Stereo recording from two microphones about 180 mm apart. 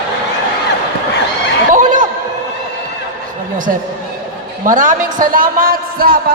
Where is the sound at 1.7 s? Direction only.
45° right (ahead or behind).